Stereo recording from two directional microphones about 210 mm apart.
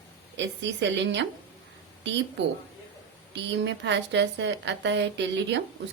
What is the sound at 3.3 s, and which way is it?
A woman's voice, 55° right (ahead or behind).